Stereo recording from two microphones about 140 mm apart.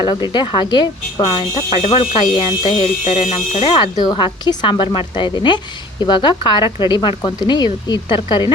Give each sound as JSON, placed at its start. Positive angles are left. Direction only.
{"t": 0.0, "sound": "speech", "side_deg": 35}
{"t": 3.0, "sound": "speech", "side_deg": 55}